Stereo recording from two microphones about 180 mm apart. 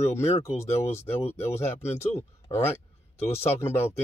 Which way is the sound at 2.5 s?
15° left (ahead or behind).